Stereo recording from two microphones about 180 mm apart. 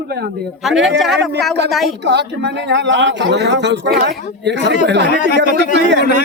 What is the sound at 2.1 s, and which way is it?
Speech, 70° right (ahead or behind).